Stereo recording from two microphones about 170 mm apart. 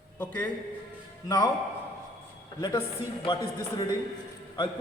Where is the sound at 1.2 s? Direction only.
25° left (ahead or behind).